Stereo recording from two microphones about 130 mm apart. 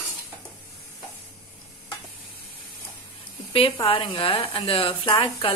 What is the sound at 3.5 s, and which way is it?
A woman's voice, 45° left (ahead or behind).